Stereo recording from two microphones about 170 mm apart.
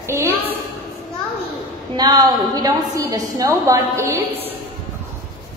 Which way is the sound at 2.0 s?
20° right (ahead or behind).